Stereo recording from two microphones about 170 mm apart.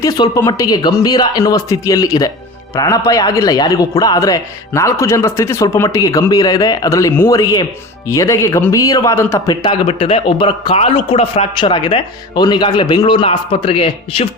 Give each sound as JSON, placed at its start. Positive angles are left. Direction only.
{"t": 0.0, "sound": "a man's voice", "side_deg": 20}
{"t": 9.6, "sound": "a man's voice", "side_deg": 30}